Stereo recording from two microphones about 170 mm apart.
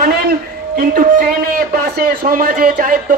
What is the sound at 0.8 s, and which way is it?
Speech, 55° right (ahead or behind).